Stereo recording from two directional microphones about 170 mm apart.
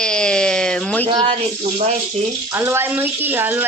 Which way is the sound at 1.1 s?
30° right (ahead or behind).